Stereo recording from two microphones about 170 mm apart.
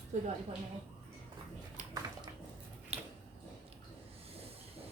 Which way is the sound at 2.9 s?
40° right (ahead or behind).